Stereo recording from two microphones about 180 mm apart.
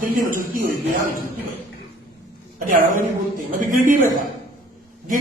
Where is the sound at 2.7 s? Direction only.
50° right (ahead or behind).